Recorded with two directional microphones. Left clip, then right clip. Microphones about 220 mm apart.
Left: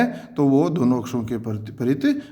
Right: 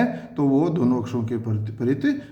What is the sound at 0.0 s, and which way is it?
A man's voice, 40° left (ahead or behind).